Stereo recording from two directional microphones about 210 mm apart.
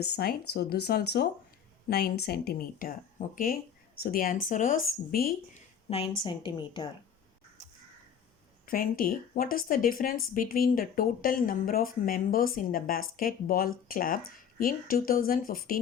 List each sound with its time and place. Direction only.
0.0 s speech: 50° left (ahead or behind)
5.9 s a woman's voice: 25° left (ahead or behind)
8.6 s speech: 45° left (ahead or behind)